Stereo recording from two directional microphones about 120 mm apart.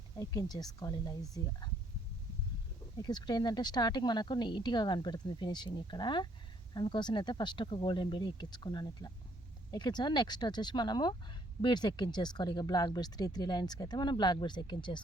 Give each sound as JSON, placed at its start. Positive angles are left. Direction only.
{"t": 0.2, "sound": "speech", "side_deg": 30}
{"t": 3.0, "sound": "speech", "side_deg": 35}